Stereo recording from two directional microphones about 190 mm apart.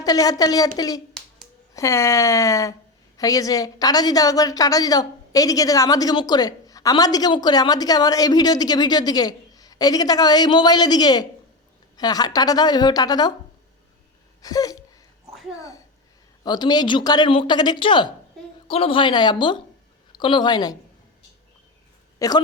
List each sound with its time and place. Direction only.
0.0 s a woman's voice: 20° left (ahead or behind)
14.4 s a woman's voice: 20° left (ahead or behind)
16.4 s a woman's voice: 20° left (ahead or behind)
22.2 s speech: 15° left (ahead or behind)